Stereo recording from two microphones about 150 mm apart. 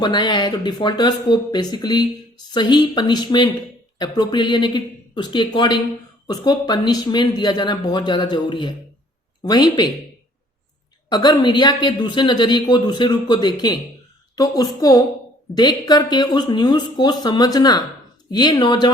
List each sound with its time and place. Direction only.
0.0 s speech: 30° left (ahead or behind)
11.1 s speech: 30° left (ahead or behind)